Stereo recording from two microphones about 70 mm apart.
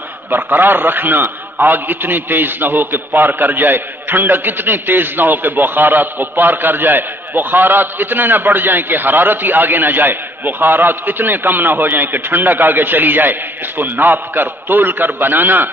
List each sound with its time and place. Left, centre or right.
0.3 s a man's voice: right